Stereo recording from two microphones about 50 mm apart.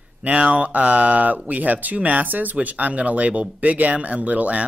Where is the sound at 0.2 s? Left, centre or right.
Right.